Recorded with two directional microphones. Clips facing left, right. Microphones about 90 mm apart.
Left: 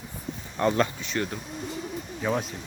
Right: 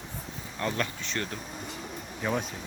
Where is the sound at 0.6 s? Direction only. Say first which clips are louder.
Left 8 dB; 20° left (ahead or behind).